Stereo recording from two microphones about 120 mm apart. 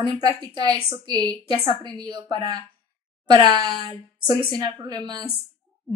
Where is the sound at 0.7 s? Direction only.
35° right (ahead or behind).